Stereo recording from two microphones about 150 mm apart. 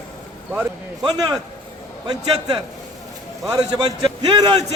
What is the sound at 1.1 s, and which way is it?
A man's voice, 25° right (ahead or behind).